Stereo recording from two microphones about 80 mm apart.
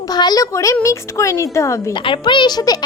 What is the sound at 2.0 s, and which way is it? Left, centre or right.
Speech, left.